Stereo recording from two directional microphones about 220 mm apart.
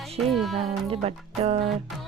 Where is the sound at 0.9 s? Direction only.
30° right (ahead or behind).